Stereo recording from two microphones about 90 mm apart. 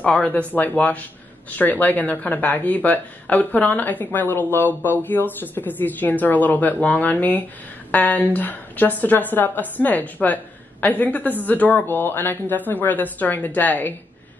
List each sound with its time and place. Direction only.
0.0 s a woman's voice: 15° left (ahead or behind)